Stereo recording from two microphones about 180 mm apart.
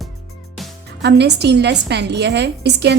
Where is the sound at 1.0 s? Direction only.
70° right (ahead or behind).